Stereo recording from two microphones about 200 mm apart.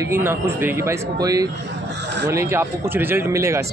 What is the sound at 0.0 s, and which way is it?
Speech, 10° right (ahead or behind).